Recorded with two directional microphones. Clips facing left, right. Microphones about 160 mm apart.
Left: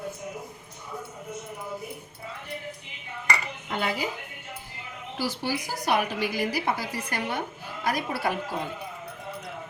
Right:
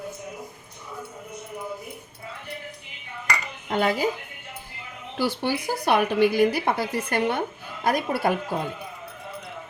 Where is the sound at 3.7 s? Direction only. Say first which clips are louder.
Right 6 dB; 45° right (ahead or behind).